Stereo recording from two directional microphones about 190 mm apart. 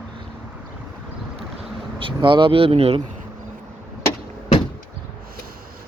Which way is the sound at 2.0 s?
25° right (ahead or behind).